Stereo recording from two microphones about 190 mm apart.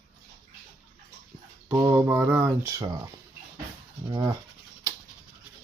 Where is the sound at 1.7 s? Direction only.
15° right (ahead or behind).